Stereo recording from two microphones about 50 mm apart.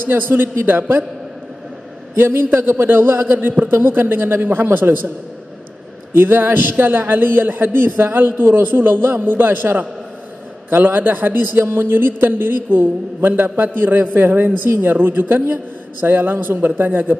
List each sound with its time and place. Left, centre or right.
0.1 s a man's voice: right
2.1 s a man's voice: right
6.1 s a man's voice: right
11.6 s a man's voice: right